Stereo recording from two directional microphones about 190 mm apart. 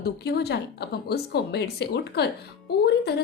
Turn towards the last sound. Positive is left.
turn(degrees=60)  # may be behind; listen again after turning